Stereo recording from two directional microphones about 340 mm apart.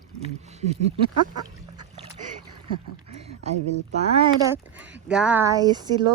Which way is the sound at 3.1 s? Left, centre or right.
Centre.